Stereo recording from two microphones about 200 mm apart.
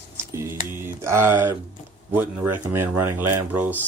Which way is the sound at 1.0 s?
10° right (ahead or behind).